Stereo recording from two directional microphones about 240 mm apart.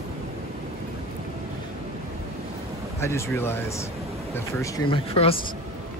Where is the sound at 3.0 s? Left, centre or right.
Centre.